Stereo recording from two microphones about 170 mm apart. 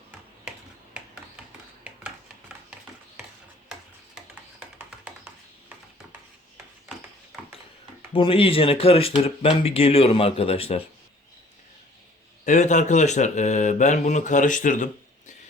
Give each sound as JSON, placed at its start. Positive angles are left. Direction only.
{"t": 4.8, "sound": "a sound", "side_deg": -10}
{"t": 8.1, "sound": "speech", "side_deg": 30}
{"t": 12.5, "sound": "speech", "side_deg": 45}